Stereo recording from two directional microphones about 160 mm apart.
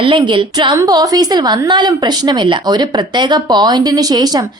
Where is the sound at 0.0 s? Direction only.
30° right (ahead or behind).